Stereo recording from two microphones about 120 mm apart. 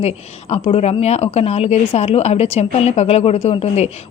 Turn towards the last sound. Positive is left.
turn(degrees=60)  # may be behind; listen again after turning